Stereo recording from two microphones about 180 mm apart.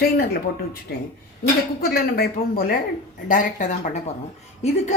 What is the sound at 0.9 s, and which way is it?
A woman's voice, 60° left (ahead or behind).